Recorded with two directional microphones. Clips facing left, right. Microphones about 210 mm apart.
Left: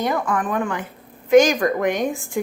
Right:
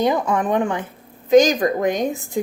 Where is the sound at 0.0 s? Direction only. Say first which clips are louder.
Right 3 dB; 20° right (ahead or behind).